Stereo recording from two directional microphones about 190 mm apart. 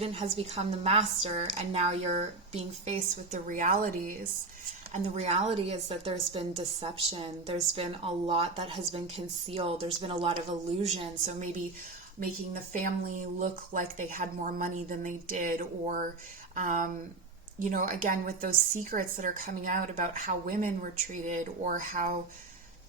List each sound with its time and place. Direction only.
0.0 s a woman's voice: 30° right (ahead or behind)
4.9 s a woman's voice: 35° right (ahead or behind)
12.7 s a woman's voice: 40° right (ahead or behind)